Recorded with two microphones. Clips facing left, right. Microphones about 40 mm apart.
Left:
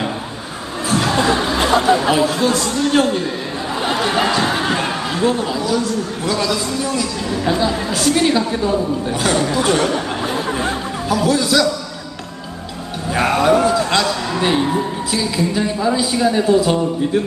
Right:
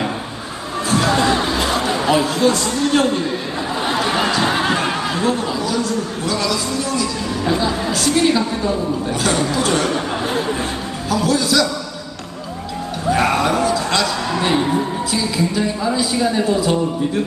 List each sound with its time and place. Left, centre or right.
0.9 s music: centre
1.5 s chatter: left
2.0 s speech: centre
4.4 s a sound: centre
5.1 s a woman's voice: centre
11.1 s a woman's voice: centre
13.1 s a woman's voice: centre